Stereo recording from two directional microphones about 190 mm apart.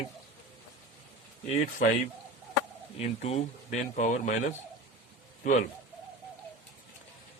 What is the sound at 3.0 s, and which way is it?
Speech, 35° left (ahead or behind).